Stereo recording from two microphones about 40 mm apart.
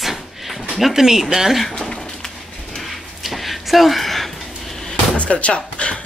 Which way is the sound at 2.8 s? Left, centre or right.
Centre.